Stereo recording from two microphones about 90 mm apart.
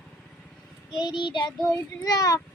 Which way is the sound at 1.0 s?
55° left (ahead or behind).